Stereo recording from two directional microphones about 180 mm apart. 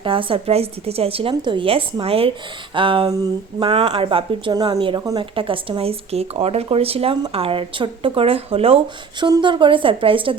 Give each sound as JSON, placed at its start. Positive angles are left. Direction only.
{"t": 0.0, "sound": "a woman's voice", "side_deg": -30}